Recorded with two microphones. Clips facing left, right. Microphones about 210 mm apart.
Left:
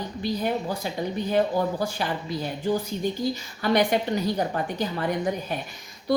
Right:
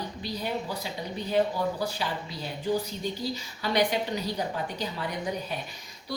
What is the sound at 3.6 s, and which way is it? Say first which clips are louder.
A woman's voice: left 4 dB; 50° left (ahead or behind).